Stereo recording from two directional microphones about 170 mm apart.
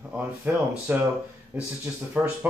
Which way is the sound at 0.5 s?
10° right (ahead or behind).